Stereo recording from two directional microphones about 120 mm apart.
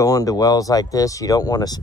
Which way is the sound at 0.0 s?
30° left (ahead or behind).